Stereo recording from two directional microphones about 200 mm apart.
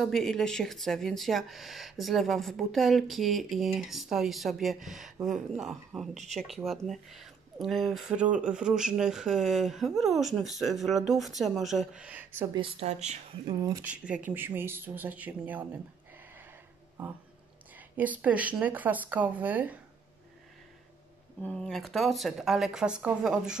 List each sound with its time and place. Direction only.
0.0 s speech: centre (ahead or behind)
6.1 s speech: 35° right (ahead or behind)
6.4 s speech: centre (ahead or behind)
12.5 s speech: 30° right (ahead or behind)
13.8 s speech: 5° right (ahead or behind)
17.7 s speech: 10° right (ahead or behind)
21.4 s speech: 5° left (ahead or behind)